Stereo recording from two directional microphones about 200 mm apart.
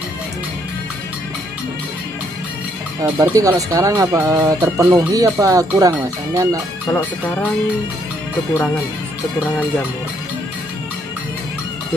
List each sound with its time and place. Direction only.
3.0 s speech: 15° right (ahead or behind)